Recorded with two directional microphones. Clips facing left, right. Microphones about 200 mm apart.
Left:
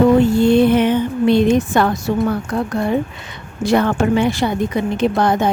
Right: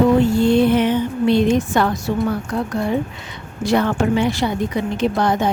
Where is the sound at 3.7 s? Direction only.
55° left (ahead or behind).